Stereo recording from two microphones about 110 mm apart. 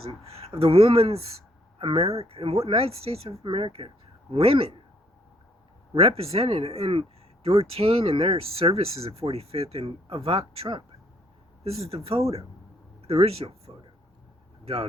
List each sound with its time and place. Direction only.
0.5 s speech: 60° right (ahead or behind)
5.9 s speech: 60° right (ahead or behind)
11.6 s speech: 65° right (ahead or behind)
14.6 s vehicle: 60° right (ahead or behind)